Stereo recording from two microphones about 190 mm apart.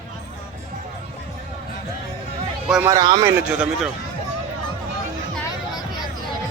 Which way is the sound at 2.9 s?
20° right (ahead or behind).